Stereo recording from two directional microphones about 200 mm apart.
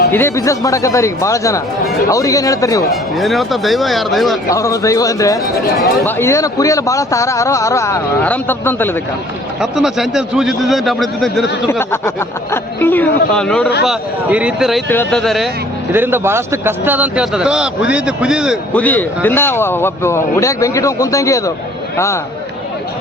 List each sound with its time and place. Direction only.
0.1 s a man's voice: 10° left (ahead or behind)
2.9 s speech: centre (ahead or behind)
4.5 s a man's voice: 15° left (ahead or behind)
9.6 s speech: centre (ahead or behind)
11.7 s a man's voice: 10° left (ahead or behind); by 14.8 s 5° right (ahead or behind)
14.8 s speech: 5° left (ahead or behind)
15.9 s speech: 10° right (ahead or behind)
18.7 s a man's voice: 10° left (ahead or behind)